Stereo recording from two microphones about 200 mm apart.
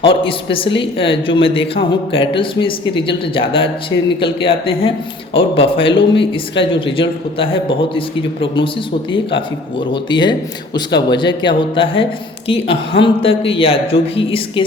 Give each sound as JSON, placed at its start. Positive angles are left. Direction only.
{"t": 0.0, "sound": "speech", "side_deg": 25}
{"t": 9.9, "sound": "speech", "side_deg": 25}